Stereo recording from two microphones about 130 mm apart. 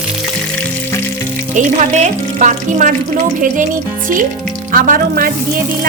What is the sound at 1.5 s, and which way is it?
Speech, 65° right (ahead or behind).